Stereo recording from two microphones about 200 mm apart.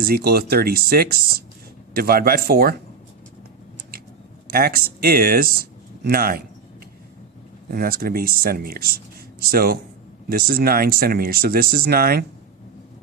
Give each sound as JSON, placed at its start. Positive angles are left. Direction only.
{"t": 0.0, "sound": "speech", "side_deg": -50}
{"t": 4.5, "sound": "speech", "side_deg": -45}
{"t": 7.7, "sound": "speech", "side_deg": -45}